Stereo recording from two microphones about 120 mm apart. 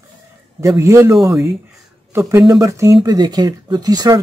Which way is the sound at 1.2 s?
Centre (ahead or behind).